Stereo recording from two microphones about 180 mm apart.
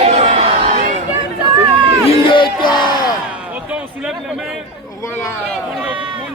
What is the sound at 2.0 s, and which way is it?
Crowd, 30° left (ahead or behind).